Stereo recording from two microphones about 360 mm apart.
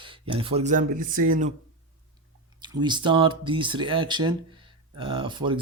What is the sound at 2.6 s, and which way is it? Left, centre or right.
Speech, centre.